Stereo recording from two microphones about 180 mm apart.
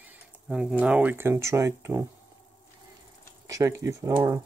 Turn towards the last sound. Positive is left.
turn(degrees=-20)  # may be behind; listen again after turning